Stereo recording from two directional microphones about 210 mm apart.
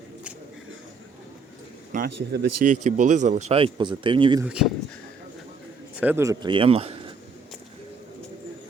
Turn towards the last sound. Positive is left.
turn(degrees=-30)  # may be behind; listen again after turning